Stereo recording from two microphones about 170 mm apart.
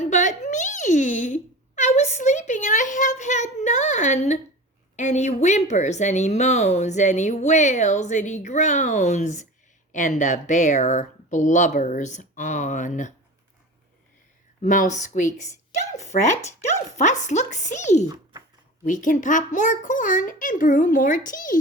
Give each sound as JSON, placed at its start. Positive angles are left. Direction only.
{"t": 0.0, "sound": "a sound", "side_deg": 45}
{"t": 4.9, "sound": "speech", "side_deg": 45}
{"t": 14.6, "sound": "speech", "side_deg": 45}
{"t": 17.0, "sound": "speech", "side_deg": 45}